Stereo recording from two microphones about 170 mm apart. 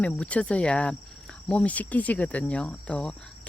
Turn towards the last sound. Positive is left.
turn(degrees=5)  # may be behind; listen again after turning